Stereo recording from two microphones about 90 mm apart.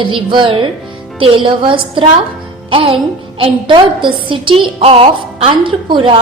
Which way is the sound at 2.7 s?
90° right.